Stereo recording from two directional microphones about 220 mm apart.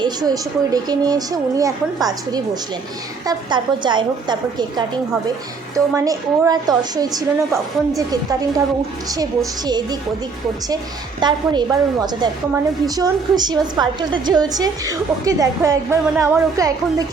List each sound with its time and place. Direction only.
0.0 s a woman's voice: 20° right (ahead or behind)
5.7 s a woman's voice: 15° right (ahead or behind)
11.2 s a woman's voice: 20° right (ahead or behind)